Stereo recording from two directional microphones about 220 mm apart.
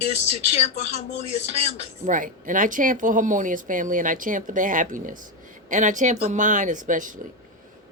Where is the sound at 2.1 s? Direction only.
35° right (ahead or behind).